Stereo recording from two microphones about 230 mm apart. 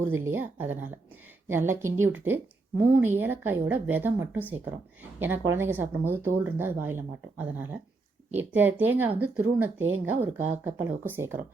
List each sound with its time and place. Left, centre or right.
0.2 s a woman's voice: centre
9.7 s speech: right
10.6 s a woman's voice: centre